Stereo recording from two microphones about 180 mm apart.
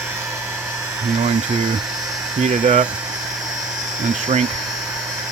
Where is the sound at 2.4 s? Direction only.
45° right (ahead or behind).